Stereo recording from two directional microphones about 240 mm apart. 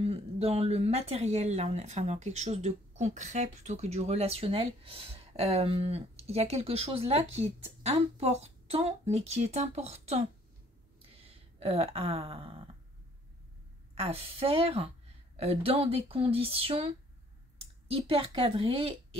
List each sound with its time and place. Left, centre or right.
0.0 s speech: right
13.9 s speech: right